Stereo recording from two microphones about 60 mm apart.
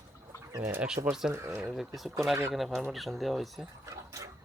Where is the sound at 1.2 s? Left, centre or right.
Centre.